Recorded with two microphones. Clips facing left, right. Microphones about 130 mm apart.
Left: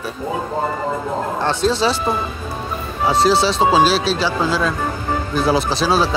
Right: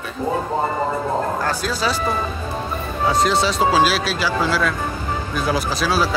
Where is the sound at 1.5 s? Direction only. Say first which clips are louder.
Left 5 dB; 30° left (ahead or behind).